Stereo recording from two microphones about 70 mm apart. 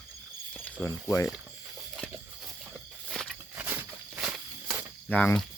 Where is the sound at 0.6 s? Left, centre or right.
Left.